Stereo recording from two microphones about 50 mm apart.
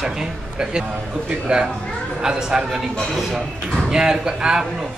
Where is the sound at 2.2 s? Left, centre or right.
Centre.